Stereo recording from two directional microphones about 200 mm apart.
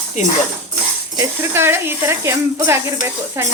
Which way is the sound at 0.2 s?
35° left (ahead or behind).